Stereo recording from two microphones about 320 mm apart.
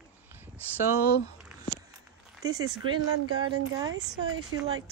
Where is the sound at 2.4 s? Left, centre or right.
Centre.